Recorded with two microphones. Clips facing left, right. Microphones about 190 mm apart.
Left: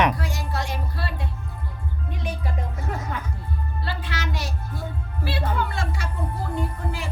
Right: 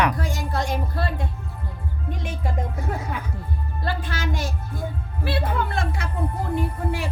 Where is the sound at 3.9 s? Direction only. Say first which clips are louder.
Right 5 dB; 50° right (ahead or behind).